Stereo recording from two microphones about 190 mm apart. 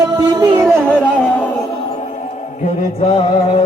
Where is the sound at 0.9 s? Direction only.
5° left (ahead or behind).